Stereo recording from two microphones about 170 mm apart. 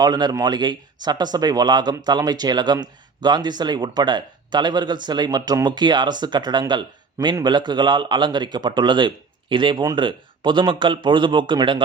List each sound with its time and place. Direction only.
0.0 s speech: 25° right (ahead or behind)